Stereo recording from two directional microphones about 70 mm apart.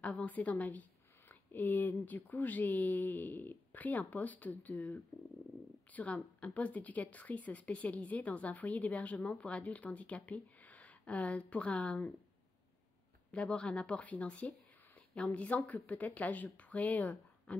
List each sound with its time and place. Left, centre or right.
0.0 s speech: centre
13.3 s speech: centre